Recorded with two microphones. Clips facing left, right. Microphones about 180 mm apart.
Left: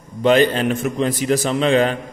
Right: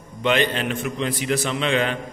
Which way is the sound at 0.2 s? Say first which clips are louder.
Left 7 dB; 40° left (ahead or behind).